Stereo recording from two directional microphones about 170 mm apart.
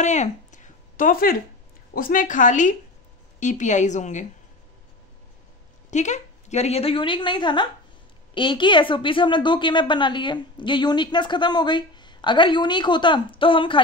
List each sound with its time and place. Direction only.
0.0 s a sound: 45° left (ahead or behind); by 1.4 s 60° left (ahead or behind)
2.0 s a woman's voice: 55° left (ahead or behind)
5.9 s a woman's voice: 45° left (ahead or behind)